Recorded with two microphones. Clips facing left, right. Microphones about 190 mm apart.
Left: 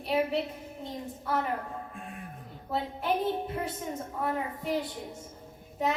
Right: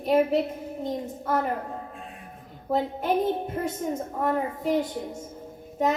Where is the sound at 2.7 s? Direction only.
45° right (ahead or behind).